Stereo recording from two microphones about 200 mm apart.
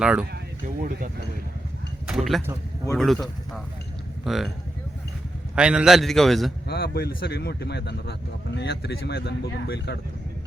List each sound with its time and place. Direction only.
0.0 s a man's voice: 5° right (ahead or behind)
0.8 s speech: 45° right (ahead or behind)
2.1 s a man's voice: centre (ahead or behind)
5.5 s a man's voice: 5° right (ahead or behind)
6.7 s speech: 50° left (ahead or behind)